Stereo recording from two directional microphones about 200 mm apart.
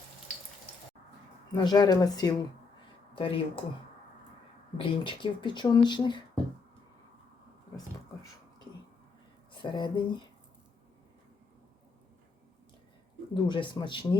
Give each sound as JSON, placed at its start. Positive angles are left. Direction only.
{"t": 1.5, "sound": "speech", "side_deg": 20}
{"t": 4.8, "sound": "speech", "side_deg": 25}
{"t": 9.5, "sound": "speech", "side_deg": 25}
{"t": 13.3, "sound": "speech", "side_deg": 25}